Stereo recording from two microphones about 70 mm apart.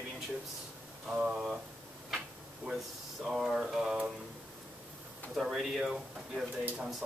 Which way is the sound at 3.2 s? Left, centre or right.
Centre.